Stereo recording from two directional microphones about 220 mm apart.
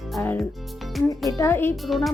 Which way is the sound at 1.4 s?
10° left (ahead or behind).